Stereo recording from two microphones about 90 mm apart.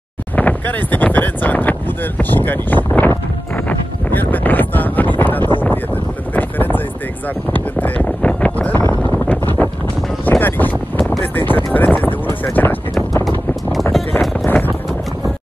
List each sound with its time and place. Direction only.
0.4 s speech: 20° left (ahead or behind)
3.5 s wind noise: 20° left (ahead or behind)
6.3 s boat: 20° left (ahead or behind)
7.5 s wind noise: 20° left (ahead or behind)
10.4 s a sound: 20° left (ahead or behind)
14.4 s a sound: 20° left (ahead or behind)